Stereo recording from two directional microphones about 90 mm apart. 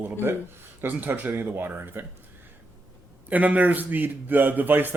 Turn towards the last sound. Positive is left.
turn(degrees=-20)  # may be behind; listen again after turning